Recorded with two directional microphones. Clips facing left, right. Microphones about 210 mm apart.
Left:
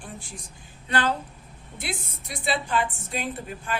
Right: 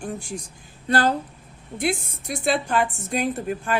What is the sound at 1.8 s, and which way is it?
Speech, 50° right (ahead or behind).